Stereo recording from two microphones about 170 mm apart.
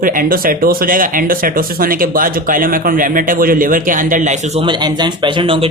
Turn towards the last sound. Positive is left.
turn(degrees=-30)  # may be behind; listen again after turning